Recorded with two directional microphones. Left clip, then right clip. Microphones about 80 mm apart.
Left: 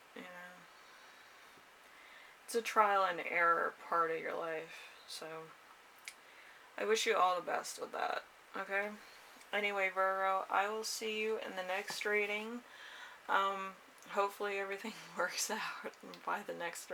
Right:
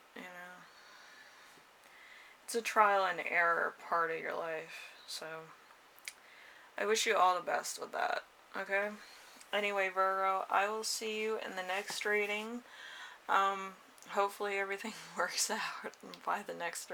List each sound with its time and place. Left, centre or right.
2.5 s speech: right
6.7 s speech: right